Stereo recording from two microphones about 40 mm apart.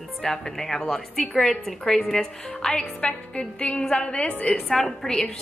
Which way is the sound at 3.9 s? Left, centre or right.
Left.